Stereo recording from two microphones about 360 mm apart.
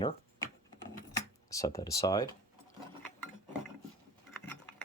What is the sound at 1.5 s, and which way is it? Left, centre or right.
Speech, centre.